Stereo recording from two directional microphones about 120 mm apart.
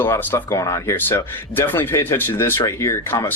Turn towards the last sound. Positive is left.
turn(degrees=25)  # may be behind; listen again after turning